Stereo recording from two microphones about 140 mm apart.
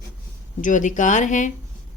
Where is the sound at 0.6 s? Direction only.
65° left (ahead or behind).